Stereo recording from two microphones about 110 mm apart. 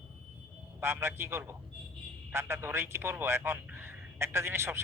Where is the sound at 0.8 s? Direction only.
25° right (ahead or behind).